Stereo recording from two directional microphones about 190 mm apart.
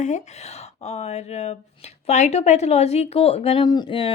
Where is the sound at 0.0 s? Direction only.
35° left (ahead or behind).